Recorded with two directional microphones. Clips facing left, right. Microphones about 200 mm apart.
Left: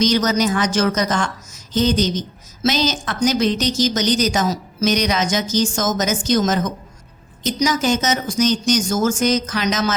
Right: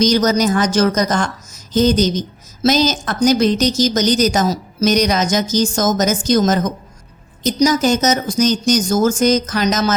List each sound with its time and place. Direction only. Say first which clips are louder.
0.0 s a woman's voice: right 3 dB; 40° right (ahead or behind)